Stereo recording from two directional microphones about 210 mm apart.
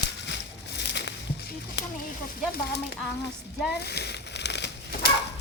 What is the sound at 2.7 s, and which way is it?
Speech, 50° left (ahead or behind).